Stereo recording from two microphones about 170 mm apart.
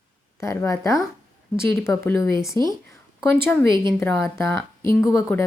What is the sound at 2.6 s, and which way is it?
A woman's voice, 25° right (ahead or behind).